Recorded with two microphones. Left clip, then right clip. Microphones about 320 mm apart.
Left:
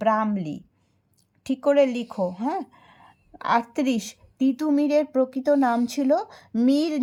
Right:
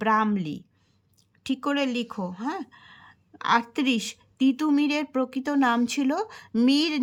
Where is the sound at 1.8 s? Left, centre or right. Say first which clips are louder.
Left 7 dB; centre.